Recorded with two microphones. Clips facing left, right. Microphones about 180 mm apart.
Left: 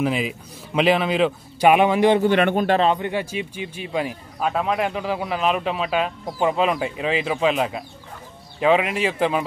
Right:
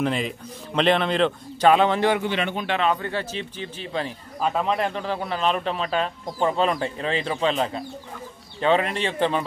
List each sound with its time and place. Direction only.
0.0 s a man's voice: 5° left (ahead or behind)
2.2 s a man's voice: 50° left (ahead or behind)
2.9 s a man's voice: 15° left (ahead or behind)